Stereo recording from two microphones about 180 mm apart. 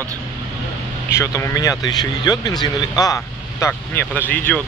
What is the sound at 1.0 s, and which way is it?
Speech, 15° left (ahead or behind).